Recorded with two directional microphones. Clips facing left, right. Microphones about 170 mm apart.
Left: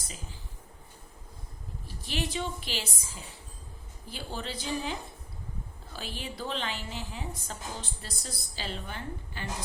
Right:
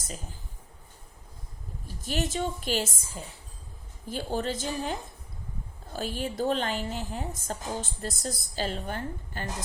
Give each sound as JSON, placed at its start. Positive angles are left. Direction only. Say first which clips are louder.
{"t": 0.0, "sound": "speech", "louder": "right 4 dB", "side_deg": -45}
{"t": 2.0, "sound": "a woman's voice", "louder": "right 4 dB", "side_deg": -45}